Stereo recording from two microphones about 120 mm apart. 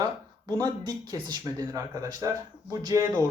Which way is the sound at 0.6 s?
35° right (ahead or behind).